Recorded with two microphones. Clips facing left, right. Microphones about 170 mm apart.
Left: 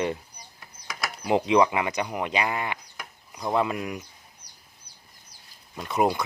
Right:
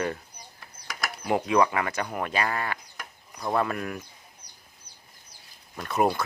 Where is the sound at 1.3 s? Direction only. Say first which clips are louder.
Left 2 dB; 20° left (ahead or behind).